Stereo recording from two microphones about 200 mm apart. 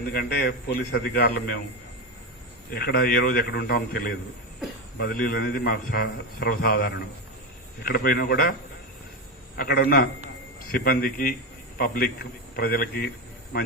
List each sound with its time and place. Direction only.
0.1 s a man's voice: 50° left (ahead or behind)
2.7 s a man's voice: 50° left (ahead or behind)
9.6 s a man's voice: 50° left (ahead or behind)